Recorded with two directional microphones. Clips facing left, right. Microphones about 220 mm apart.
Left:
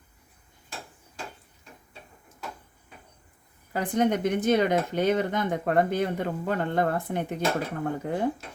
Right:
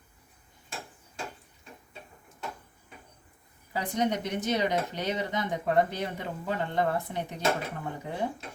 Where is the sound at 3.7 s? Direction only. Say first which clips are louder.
Left 4 dB; 50° left (ahead or behind).